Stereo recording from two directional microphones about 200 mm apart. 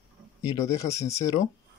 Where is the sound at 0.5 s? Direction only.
15° left (ahead or behind).